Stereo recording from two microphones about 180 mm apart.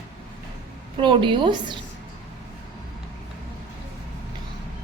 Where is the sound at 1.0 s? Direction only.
25° right (ahead or behind).